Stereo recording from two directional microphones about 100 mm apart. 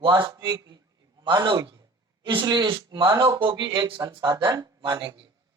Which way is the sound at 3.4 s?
55° right (ahead or behind).